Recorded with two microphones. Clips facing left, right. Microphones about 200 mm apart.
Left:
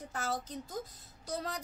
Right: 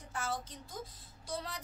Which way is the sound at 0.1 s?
40° left (ahead or behind).